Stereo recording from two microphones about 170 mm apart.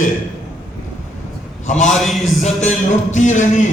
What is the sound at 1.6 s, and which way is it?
Speech, 45° left (ahead or behind).